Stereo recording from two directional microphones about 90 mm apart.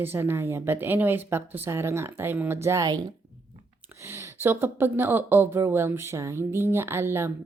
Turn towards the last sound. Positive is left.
turn(degrees=-30)  # may be behind; listen again after turning